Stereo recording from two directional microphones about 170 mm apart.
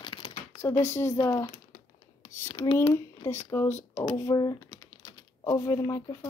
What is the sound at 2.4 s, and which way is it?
Speech, 20° left (ahead or behind).